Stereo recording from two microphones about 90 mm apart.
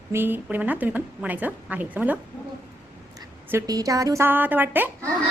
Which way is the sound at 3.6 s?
40° right (ahead or behind).